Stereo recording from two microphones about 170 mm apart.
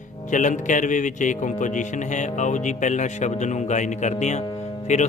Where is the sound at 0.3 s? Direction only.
50° left (ahead or behind).